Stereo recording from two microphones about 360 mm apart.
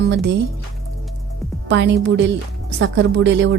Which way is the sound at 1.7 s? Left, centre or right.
Right.